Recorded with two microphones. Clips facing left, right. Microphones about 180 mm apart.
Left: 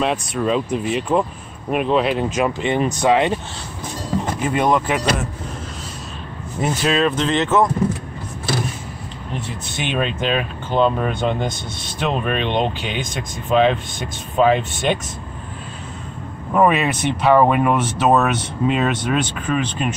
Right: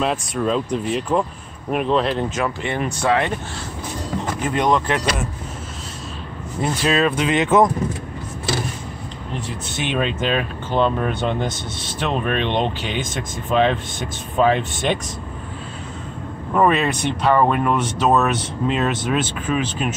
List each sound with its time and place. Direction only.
0.0 s speech: centre (ahead or behind); by 3.3 s 15° left (ahead or behind)
4.4 s speech: 5° left (ahead or behind)
6.6 s speech: centre (ahead or behind)
9.8 s speech: centre (ahead or behind)
16.5 s speech: 5° left (ahead or behind)